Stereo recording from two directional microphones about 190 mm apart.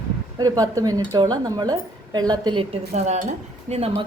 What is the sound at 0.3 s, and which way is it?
A woman's voice, 20° right (ahead or behind).